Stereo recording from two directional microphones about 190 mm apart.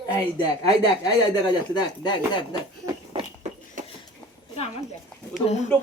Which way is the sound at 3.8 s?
40° right (ahead or behind).